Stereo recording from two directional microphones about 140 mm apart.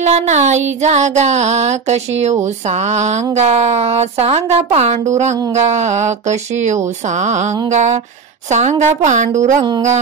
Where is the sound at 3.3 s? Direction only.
55° right (ahead or behind).